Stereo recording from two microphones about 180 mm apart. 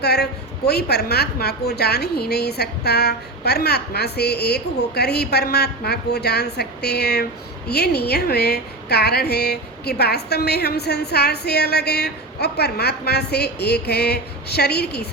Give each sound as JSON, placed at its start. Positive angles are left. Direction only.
{"t": 0.0, "sound": "a woman's voice", "side_deg": 65}